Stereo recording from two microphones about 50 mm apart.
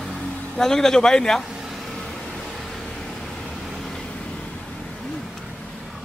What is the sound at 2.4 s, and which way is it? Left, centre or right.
Vehicle, centre.